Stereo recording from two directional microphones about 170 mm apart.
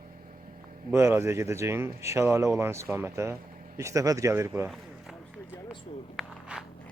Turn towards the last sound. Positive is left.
turn(degrees=0)  # may be behind; listen again after turning